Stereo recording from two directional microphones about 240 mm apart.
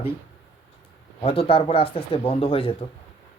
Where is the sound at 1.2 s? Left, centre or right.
Left.